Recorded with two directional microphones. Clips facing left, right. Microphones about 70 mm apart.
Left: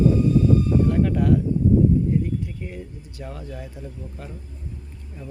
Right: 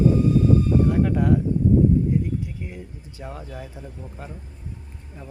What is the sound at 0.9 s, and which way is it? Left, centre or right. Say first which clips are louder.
Speech: even; centre.